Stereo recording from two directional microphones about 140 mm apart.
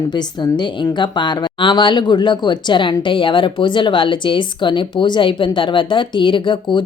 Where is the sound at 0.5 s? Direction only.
35° left (ahead or behind).